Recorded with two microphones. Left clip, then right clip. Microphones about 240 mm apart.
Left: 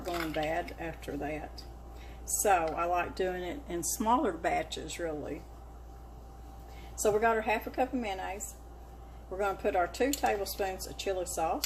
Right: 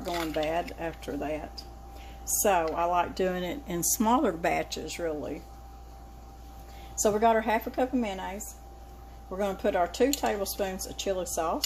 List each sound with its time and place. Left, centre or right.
0.1 s a sound: centre
0.3 s a woman's voice: right
2.4 s speech: right
7.0 s a woman's voice: right
9.4 s a woman's voice: right